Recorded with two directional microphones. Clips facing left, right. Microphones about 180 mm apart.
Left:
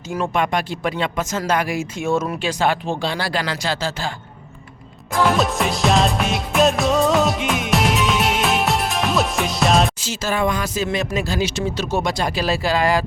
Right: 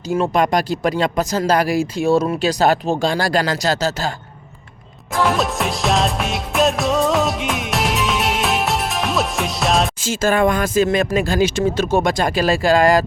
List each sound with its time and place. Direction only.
0.2 s speech: 40° right (ahead or behind)
5.1 s music: centre (ahead or behind)
10.0 s speech: 50° right (ahead or behind)